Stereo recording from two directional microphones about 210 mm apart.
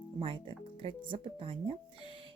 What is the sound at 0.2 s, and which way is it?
Speech, 25° right (ahead or behind).